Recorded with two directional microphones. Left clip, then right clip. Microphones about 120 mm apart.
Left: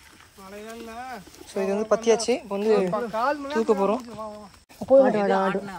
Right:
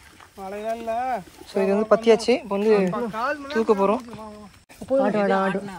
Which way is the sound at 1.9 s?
15° left (ahead or behind).